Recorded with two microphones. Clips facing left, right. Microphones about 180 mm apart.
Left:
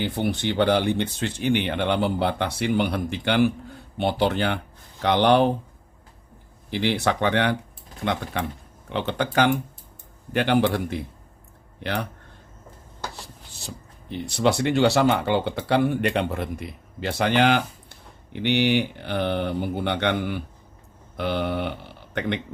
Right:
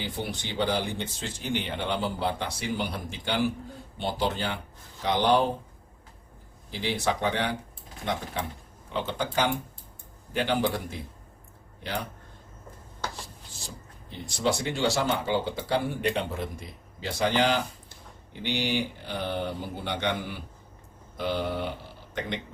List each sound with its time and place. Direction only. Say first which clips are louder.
0.0 s speech: left 9 dB; 60° left (ahead or behind)
6.7 s speech: left 5 dB; 65° left (ahead or behind)
14.1 s speech: left 5 dB; 65° left (ahead or behind)